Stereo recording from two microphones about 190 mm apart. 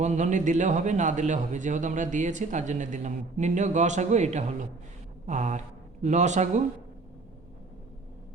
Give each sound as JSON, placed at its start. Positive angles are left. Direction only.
{"t": 0.0, "sound": "speech", "side_deg": -40}